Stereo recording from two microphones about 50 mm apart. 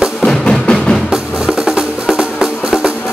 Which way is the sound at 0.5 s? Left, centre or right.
Centre.